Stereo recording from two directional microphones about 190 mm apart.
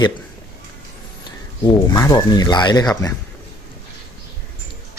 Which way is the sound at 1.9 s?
20° left (ahead or behind).